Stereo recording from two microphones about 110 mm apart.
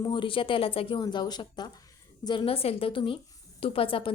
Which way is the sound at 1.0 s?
40° left (ahead or behind).